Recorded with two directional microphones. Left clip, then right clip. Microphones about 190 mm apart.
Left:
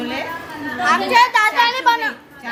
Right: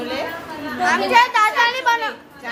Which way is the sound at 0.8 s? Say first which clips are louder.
Left 1 dB; 10° left (ahead or behind).